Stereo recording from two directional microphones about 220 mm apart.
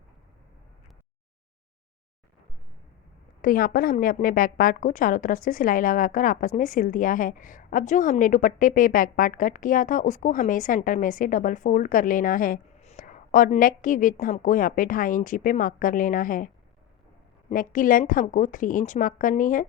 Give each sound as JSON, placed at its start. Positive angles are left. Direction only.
{"t": 3.4, "sound": "a woman's voice", "side_deg": 40}
{"t": 17.5, "sound": "a woman's voice", "side_deg": 40}